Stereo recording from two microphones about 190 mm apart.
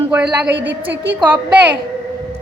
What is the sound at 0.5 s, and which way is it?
Speech, 70° right (ahead or behind).